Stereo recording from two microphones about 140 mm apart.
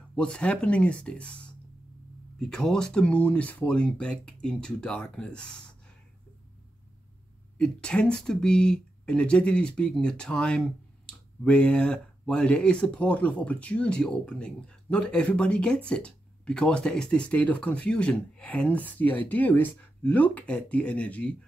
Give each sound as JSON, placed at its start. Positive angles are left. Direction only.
{"t": 0.1, "sound": "speech", "side_deg": 5}
{"t": 7.5, "sound": "speech", "side_deg": 5}